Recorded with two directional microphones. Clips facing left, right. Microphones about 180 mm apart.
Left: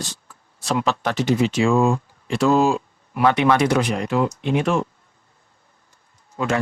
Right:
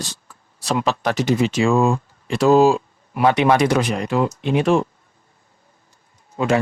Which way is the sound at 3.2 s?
20° right (ahead or behind).